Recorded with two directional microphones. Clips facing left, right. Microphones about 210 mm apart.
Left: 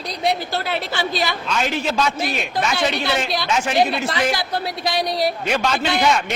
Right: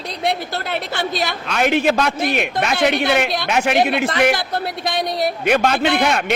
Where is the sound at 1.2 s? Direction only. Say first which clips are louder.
Right 4 dB; 60° right (ahead or behind).